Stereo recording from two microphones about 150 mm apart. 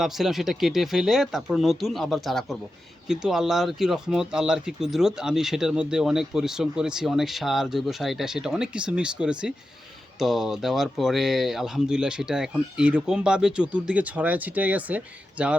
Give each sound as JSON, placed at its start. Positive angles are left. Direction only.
{"t": 0.0, "sound": "speech", "side_deg": 0}